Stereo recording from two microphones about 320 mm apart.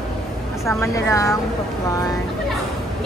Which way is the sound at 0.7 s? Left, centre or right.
Centre.